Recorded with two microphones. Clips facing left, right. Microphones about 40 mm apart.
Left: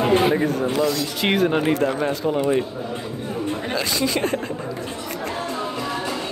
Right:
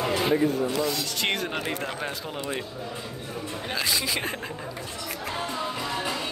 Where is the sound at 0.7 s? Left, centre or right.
Left.